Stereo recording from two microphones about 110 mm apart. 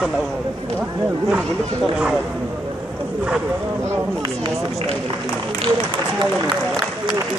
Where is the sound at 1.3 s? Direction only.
5° right (ahead or behind).